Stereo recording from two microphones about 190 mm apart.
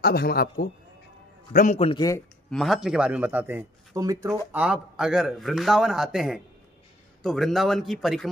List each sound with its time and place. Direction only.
0.0 s speech: 55° left (ahead or behind)
1.5 s speech: 45° left (ahead or behind)
1.8 s speech: 30° left (ahead or behind)
2.5 s speech: centre (ahead or behind); by 4.4 s 20° right (ahead or behind)
4.5 s a man's voice: 5° right (ahead or behind)